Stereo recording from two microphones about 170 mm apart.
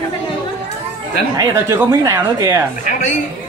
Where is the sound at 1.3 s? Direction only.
20° right (ahead or behind).